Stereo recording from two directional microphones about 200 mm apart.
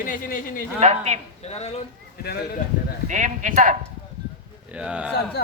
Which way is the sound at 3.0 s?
40° right (ahead or behind).